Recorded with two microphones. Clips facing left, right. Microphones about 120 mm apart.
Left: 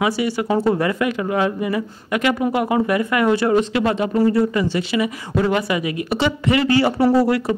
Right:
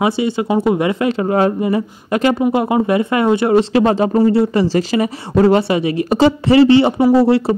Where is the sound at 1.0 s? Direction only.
30° right (ahead or behind).